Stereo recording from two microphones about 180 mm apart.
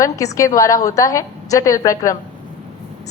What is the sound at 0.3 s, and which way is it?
A woman's voice, 20° left (ahead or behind).